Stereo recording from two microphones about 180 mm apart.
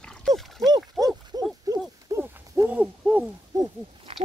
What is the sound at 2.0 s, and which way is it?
Hoot, 15° right (ahead or behind).